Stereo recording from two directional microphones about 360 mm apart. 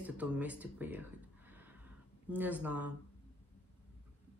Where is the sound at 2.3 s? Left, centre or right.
Centre.